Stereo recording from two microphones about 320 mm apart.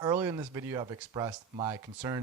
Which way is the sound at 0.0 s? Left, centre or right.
Centre.